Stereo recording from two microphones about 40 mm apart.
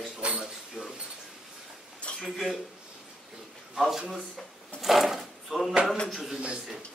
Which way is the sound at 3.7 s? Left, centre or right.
Centre.